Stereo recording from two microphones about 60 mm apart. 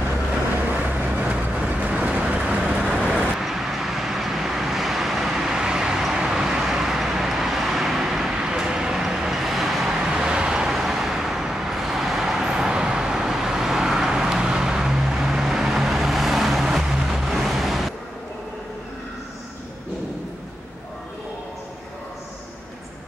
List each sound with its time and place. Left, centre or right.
0.7 s vehicle: right; by 9.9 s centre
9.9 s vehicle: centre